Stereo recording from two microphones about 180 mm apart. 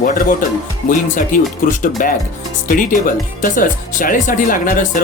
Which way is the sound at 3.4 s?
50° left (ahead or behind).